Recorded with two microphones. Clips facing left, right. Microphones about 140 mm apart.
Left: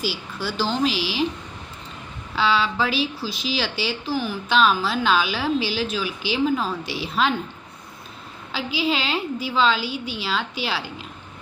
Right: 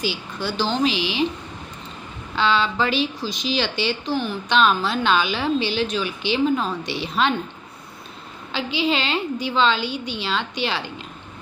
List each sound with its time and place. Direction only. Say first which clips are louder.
0.0 s a woman's voice: right 1 dB; 5° left (ahead or behind)
2.3 s a woman's voice: right 1 dB; 5° left (ahead or behind)
8.5 s a woman's voice: right 2 dB; 5° left (ahead or behind)